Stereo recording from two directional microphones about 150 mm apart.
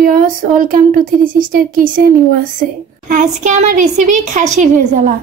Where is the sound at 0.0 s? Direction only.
70° right (ahead or behind).